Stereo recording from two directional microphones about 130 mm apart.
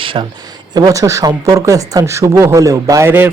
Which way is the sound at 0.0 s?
40° right (ahead or behind).